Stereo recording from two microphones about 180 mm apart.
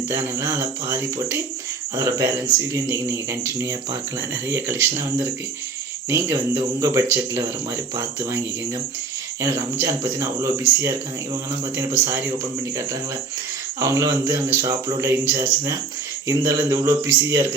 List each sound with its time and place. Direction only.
0.1 s speech: 15° right (ahead or behind)
9.4 s speech: 15° right (ahead or behind)
13.7 s speech: 15° right (ahead or behind)